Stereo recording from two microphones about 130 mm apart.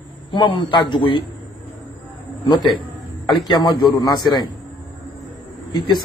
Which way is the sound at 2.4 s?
35° left (ahead or behind).